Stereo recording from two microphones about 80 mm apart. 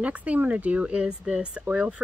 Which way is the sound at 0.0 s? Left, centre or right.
Centre.